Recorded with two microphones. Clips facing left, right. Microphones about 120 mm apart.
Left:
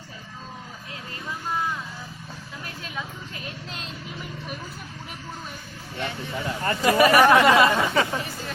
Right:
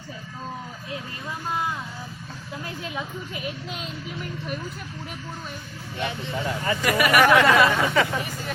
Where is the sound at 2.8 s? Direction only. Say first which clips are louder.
Right 3 dB; 15° right (ahead or behind).